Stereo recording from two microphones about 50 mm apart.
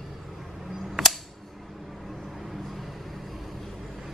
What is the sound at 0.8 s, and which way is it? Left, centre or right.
Scissors, centre.